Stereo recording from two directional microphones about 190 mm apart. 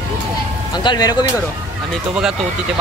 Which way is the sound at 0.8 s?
20° left (ahead or behind).